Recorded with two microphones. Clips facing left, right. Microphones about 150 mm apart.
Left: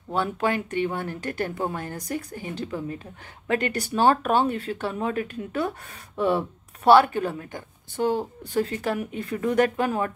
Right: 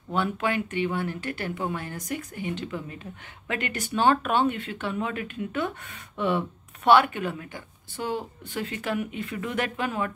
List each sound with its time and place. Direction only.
0.1 s speech: 40° left (ahead or behind)